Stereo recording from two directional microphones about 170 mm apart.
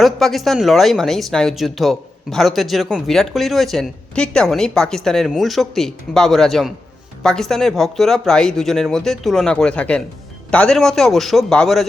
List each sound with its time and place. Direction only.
0.0 s speech: centre (ahead or behind)